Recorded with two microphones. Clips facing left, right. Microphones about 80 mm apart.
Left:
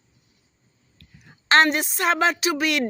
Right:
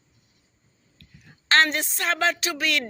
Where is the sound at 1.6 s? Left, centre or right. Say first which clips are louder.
Left 5 dB; centre.